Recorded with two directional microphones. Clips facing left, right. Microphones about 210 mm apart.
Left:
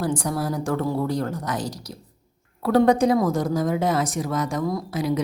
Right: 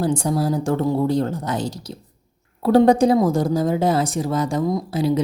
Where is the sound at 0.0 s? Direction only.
25° right (ahead or behind).